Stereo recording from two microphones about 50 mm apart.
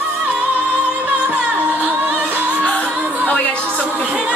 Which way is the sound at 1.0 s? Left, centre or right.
Right.